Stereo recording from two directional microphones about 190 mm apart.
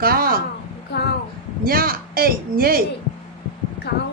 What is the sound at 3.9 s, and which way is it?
Speech, 60° left (ahead or behind).